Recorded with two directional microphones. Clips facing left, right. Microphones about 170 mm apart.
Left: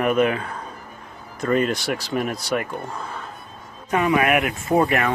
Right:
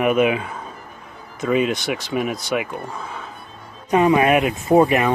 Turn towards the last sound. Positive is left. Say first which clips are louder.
# right 4 dB
turn(degrees=-20)  # may be behind; listen again after turning